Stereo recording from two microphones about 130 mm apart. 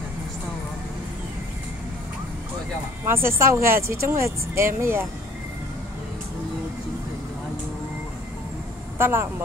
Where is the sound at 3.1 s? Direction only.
20° right (ahead or behind).